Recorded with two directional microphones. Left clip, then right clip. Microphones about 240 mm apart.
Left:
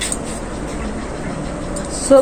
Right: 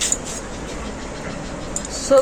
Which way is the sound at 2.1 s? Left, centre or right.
Centre.